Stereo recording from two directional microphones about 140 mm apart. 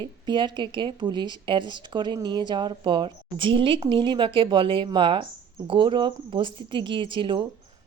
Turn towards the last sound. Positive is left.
turn(degrees=-35)  # may be behind; listen again after turning